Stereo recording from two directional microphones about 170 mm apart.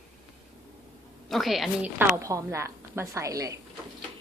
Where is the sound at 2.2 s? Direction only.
20° right (ahead or behind).